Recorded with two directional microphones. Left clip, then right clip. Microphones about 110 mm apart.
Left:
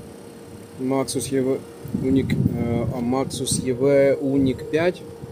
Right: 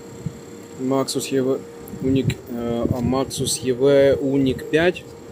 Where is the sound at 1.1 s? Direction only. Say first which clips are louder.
Right 2 dB; 85° left.